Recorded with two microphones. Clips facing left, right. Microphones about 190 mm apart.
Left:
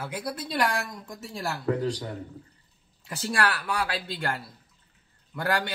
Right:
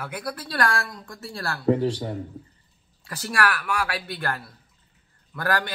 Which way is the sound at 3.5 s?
25° left (ahead or behind).